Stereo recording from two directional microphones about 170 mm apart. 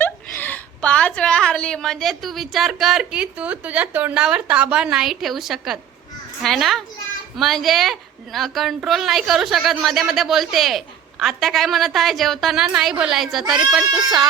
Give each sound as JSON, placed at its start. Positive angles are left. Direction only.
{"t": 0.0, "sound": "a woman's voice", "side_deg": 10}
{"t": 13.4, "sound": "speech", "side_deg": -25}
{"t": 13.7, "sound": "a woman's voice", "side_deg": 0}